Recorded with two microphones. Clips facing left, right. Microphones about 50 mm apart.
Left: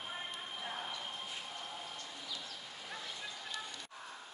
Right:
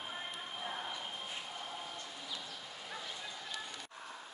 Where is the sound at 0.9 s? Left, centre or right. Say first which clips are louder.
Right 1 dB; centre.